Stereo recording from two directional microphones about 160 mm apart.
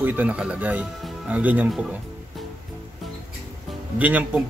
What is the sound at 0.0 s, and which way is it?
Speech, 10° right (ahead or behind).